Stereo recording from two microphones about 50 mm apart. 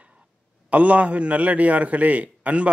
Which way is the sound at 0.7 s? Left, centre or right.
Right.